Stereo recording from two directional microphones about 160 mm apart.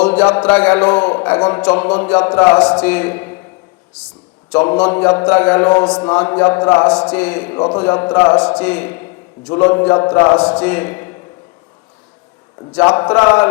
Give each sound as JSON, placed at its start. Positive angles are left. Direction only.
{"t": 0.0, "sound": "a man's voice", "side_deg": 10}
{"t": 2.6, "sound": "a man's voice", "side_deg": 5}
{"t": 4.5, "sound": "a man's voice", "side_deg": 15}
{"t": 7.1, "sound": "a man's voice", "side_deg": 10}
{"t": 8.4, "sound": "a man's voice", "side_deg": 10}
{"t": 10.3, "sound": "a man's voice", "side_deg": 10}
{"t": 12.8, "sound": "a man's voice", "side_deg": 30}